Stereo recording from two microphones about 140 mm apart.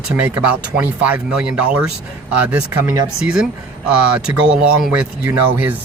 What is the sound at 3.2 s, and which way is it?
Speech, 5° right (ahead or behind).